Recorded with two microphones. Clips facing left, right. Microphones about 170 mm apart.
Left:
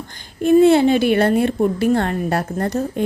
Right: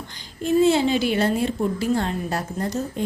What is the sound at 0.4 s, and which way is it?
A woman's voice, 60° left (ahead or behind).